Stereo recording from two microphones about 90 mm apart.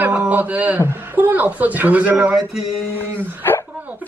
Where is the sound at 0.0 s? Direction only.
15° right (ahead or behind).